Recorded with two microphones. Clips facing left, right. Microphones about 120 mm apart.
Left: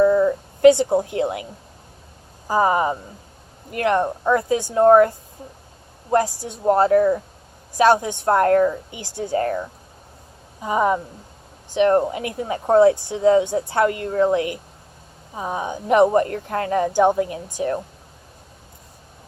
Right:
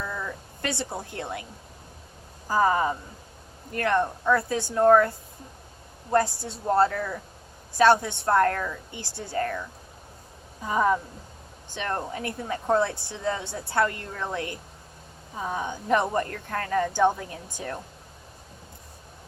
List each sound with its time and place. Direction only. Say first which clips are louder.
0.0 s a sound: left 18 dB; 25° left (ahead or behind)
2.5 s a woman's voice: left 4 dB; 15° left (ahead or behind)
8.9 s speech: left 10 dB; 15° left (ahead or behind)
10.6 s speech: left 4 dB; 15° left (ahead or behind)